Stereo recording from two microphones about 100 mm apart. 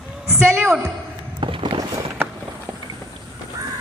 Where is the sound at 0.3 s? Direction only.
15° right (ahead or behind).